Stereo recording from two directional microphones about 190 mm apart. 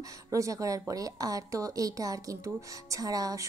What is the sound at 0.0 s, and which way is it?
A woman's voice, 15° right (ahead or behind).